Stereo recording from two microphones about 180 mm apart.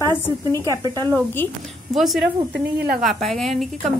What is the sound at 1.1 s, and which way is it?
Speech, 10° left (ahead or behind).